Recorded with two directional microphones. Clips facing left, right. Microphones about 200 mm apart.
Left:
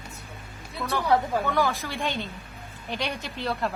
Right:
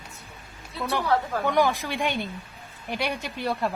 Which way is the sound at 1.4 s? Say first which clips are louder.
Right 3 dB; 15° right (ahead or behind).